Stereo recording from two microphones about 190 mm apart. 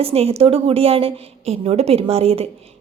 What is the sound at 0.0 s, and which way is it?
A woman's voice, 30° right (ahead or behind).